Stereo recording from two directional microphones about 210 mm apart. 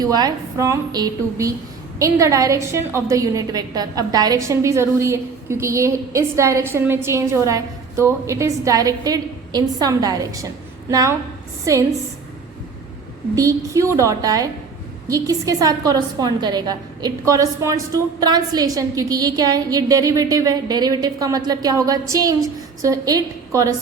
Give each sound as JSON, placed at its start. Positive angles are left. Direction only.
{"t": 0.0, "sound": "a woman's voice", "side_deg": -20}
{"t": 11.6, "sound": "a woman's voice", "side_deg": -15}
{"t": 13.3, "sound": "a woman's voice", "side_deg": -15}